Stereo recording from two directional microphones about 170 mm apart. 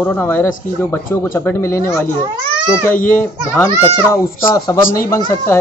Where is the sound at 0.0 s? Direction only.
10° left (ahead or behind).